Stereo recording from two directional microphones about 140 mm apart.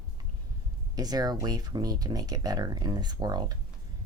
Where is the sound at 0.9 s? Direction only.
30° right (ahead or behind).